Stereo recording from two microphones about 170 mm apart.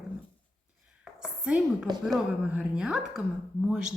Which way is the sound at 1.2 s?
5° right (ahead or behind).